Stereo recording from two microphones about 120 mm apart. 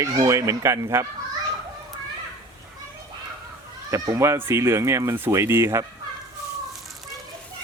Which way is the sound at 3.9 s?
25° right (ahead or behind).